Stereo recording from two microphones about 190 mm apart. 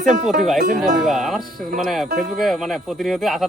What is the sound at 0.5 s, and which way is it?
Speech, 45° right (ahead or behind).